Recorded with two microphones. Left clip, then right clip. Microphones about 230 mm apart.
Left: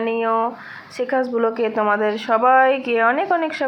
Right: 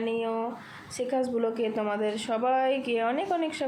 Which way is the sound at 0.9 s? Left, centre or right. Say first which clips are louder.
Left 8 dB; centre.